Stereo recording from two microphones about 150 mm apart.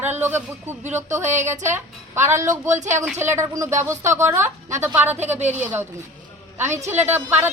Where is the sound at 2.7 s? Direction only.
55° right (ahead or behind).